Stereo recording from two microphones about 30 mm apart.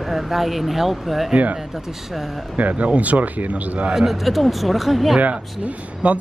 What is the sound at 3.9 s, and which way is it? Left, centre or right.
Speech, centre.